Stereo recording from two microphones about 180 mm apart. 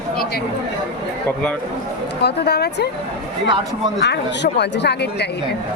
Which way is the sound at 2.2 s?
65° left (ahead or behind).